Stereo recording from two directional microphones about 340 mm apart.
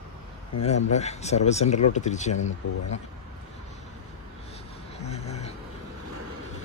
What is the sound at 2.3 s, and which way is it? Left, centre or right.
Speech, left.